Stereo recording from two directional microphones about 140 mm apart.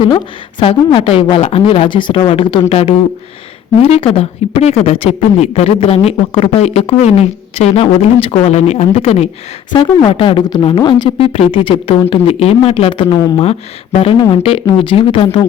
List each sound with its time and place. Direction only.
0.6 s a woman's voice: 40° left (ahead or behind)
14.4 s a woman's voice: 40° left (ahead or behind)